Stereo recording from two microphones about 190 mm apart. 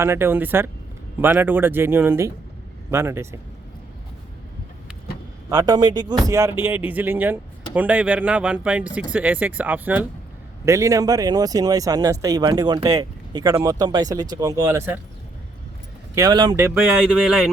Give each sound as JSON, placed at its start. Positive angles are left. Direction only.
{"t": 0.0, "sound": "speech", "side_deg": -15}
{"t": 5.5, "sound": "speech", "side_deg": -20}
{"t": 16.1, "sound": "speech", "side_deg": -20}
{"t": 16.6, "sound": "speech", "side_deg": -5}